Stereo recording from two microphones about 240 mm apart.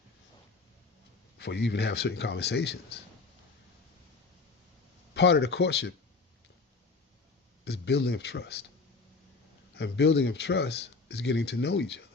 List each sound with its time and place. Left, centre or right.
1.4 s speech: left
5.1 s speech: left
7.6 s speech: left
9.7 s speech: left